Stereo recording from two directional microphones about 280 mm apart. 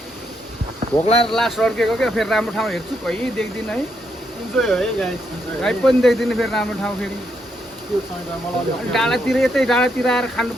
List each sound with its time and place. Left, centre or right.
1.0 s speech: left
1.3 s speech: centre